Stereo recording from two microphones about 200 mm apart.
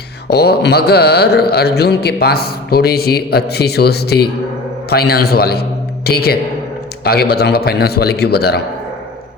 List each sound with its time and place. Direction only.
0.3 s speech: 55° left (ahead or behind)